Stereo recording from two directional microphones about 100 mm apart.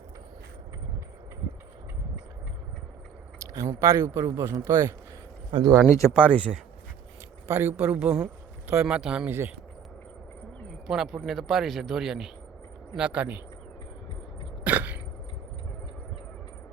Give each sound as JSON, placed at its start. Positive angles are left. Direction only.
{"t": 3.5, "sound": "a man's voice", "side_deg": -35}
{"t": 5.5, "sound": "speech", "side_deg": -50}
{"t": 5.9, "sound": "speech", "side_deg": 30}
{"t": 6.1, "sound": "speech", "side_deg": 15}
{"t": 7.4, "sound": "speech", "side_deg": -25}
{"t": 8.8, "sound": "speech", "side_deg": -5}
{"t": 10.8, "sound": "speech", "side_deg": -5}
{"t": 14.6, "sound": "a sound", "side_deg": -15}